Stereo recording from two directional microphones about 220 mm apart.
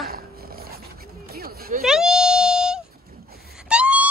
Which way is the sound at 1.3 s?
45° right (ahead or behind).